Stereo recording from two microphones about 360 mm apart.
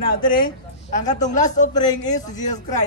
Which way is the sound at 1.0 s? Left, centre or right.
Centre.